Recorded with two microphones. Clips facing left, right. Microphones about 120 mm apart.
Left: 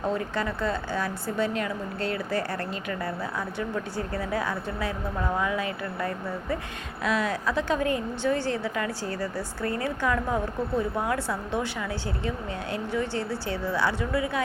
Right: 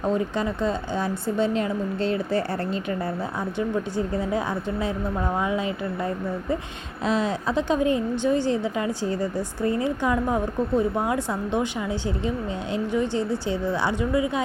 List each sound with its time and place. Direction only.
0.0 s a woman's voice: 20° right (ahead or behind)
3.6 s a woman's voice: 20° right (ahead or behind)